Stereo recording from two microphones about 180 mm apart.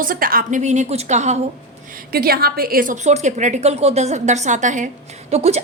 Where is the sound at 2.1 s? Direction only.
55° right (ahead or behind); by 5.6 s 35° right (ahead or behind).